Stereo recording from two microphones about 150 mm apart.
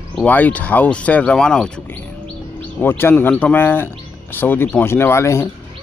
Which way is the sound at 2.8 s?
15° left (ahead or behind).